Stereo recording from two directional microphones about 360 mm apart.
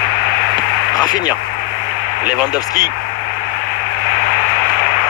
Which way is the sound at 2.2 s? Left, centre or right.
Centre.